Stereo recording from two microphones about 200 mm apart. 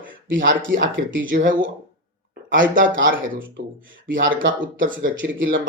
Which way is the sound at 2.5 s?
70° right (ahead or behind).